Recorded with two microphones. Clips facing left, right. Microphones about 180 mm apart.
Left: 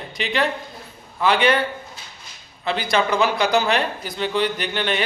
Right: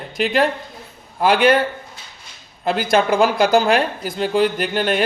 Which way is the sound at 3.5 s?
50° right (ahead or behind).